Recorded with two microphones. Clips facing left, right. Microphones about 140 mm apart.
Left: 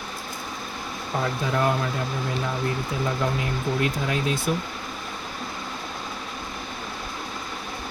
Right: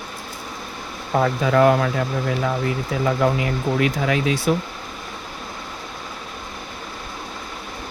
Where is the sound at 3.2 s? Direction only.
70° right (ahead or behind).